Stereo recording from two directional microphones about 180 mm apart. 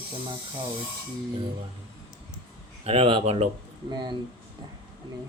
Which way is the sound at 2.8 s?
30° right (ahead or behind).